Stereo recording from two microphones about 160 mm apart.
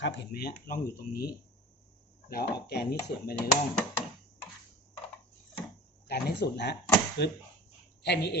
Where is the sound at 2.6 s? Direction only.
80° left.